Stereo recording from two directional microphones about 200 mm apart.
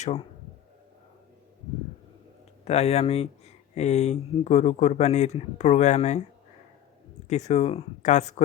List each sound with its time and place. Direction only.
2.6 s speech: 30° left (ahead or behind)
7.3 s speech: 35° left (ahead or behind)